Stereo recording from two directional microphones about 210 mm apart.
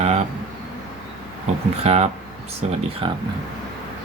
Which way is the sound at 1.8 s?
30° right (ahead or behind).